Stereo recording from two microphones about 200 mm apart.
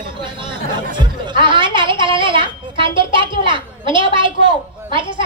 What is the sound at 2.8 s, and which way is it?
A woman's voice, 25° right (ahead or behind).